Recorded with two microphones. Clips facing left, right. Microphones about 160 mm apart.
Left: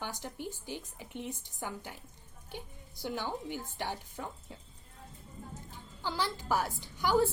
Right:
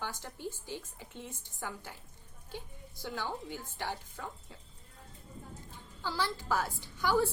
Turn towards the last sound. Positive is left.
turn(degrees=15)  # may be behind; listen again after turning